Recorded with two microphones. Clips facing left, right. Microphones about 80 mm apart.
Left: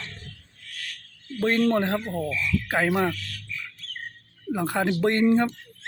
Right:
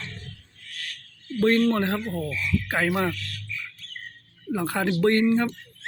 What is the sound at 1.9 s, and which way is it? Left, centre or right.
Speech, centre.